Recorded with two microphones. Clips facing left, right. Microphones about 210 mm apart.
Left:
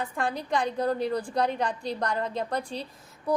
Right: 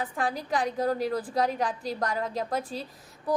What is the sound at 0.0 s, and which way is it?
A woman's voice, centre (ahead or behind).